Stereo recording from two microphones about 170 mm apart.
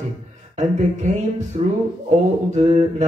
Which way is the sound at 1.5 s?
40° right (ahead or behind).